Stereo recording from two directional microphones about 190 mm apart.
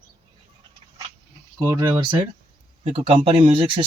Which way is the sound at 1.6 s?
20° right (ahead or behind).